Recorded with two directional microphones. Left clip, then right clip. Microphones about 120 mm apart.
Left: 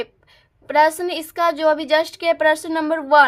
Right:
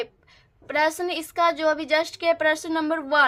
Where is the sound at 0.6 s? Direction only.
35° left (ahead or behind).